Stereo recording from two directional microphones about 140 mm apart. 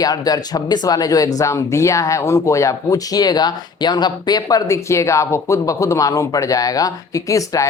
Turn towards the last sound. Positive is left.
turn(degrees=25)  # may be behind; listen again after turning